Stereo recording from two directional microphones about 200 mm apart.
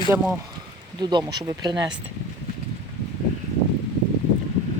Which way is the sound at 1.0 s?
20° right (ahead or behind).